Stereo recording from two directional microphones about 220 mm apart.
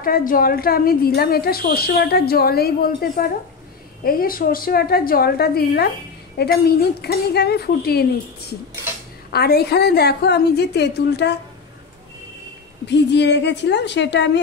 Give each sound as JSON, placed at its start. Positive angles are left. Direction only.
{"t": 0.0, "sound": "a woman's voice", "side_deg": 40}
{"t": 12.8, "sound": "a woman's voice", "side_deg": 50}